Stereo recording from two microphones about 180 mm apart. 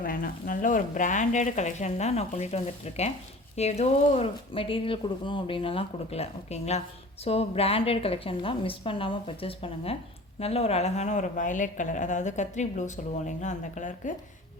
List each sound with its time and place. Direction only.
0.0 s speech: 50° left (ahead or behind)